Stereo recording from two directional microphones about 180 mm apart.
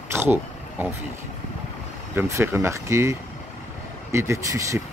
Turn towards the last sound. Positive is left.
turn(degrees=-15)  # may be behind; listen again after turning